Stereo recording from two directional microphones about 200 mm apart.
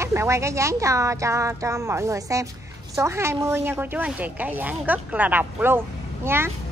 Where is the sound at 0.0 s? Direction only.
15° right (ahead or behind).